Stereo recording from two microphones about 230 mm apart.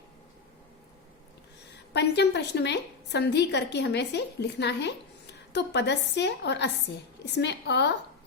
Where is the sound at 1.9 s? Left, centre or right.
Left.